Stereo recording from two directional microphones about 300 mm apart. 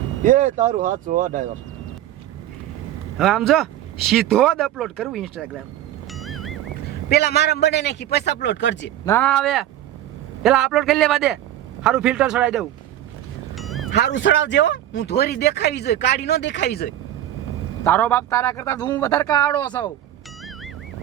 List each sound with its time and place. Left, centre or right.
0.3 s speech: right
3.2 s speech: centre
6.1 s music: centre
7.1 s speech: left
9.0 s speech: centre
13.6 s cat: centre
13.9 s speech: left
17.8 s a man's voice: centre